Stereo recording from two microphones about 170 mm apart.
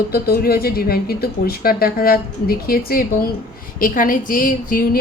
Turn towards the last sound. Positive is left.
turn(degrees=55)  # may be behind; listen again after turning